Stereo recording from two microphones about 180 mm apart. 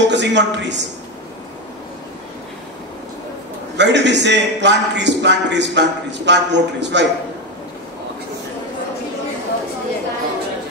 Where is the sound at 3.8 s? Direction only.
75° right (ahead or behind).